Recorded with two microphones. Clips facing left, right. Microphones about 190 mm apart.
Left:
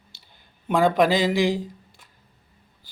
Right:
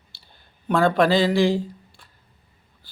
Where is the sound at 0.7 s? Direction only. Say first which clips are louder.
Right 1 dB; 15° left (ahead or behind).